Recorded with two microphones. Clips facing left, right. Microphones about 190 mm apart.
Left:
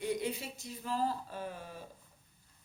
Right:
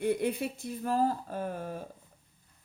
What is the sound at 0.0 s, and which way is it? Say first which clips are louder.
Speech: right 6 dB; 55° right (ahead or behind).